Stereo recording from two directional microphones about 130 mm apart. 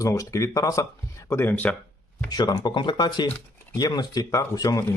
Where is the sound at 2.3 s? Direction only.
35° left (ahead or behind).